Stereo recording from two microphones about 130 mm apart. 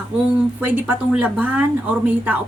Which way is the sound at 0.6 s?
10° right (ahead or behind).